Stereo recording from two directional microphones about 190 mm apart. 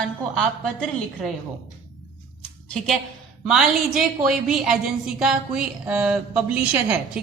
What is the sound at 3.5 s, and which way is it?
A woman's voice, 5° right (ahead or behind).